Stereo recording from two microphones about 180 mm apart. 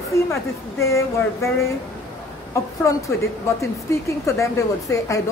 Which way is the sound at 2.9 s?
15° left (ahead or behind).